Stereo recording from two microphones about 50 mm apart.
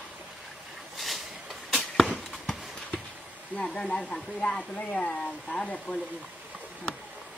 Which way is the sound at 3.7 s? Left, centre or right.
Centre.